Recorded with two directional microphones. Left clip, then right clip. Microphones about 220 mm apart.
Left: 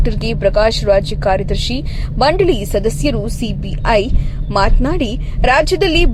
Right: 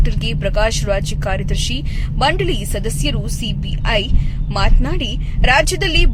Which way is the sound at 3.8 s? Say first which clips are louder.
Left 5 dB; 10° left (ahead or behind).